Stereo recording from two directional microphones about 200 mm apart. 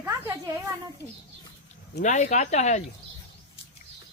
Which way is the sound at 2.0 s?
35° left (ahead or behind).